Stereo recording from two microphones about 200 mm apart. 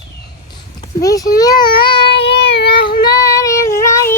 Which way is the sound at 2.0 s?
55° left (ahead or behind).